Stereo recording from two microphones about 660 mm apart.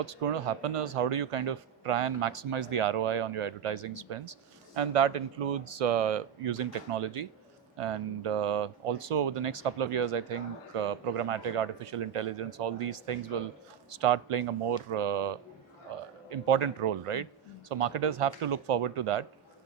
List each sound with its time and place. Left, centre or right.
0.0 s speech: right